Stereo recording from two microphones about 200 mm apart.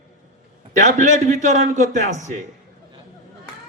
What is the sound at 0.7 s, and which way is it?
A man's voice, 35° right (ahead or behind).